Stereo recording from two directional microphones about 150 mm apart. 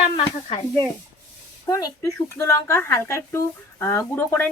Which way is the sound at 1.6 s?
20° left (ahead or behind).